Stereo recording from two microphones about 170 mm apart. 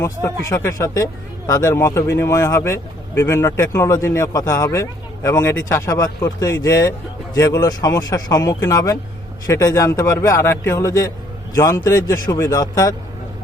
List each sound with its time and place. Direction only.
0.0 s speech: 15° left (ahead or behind)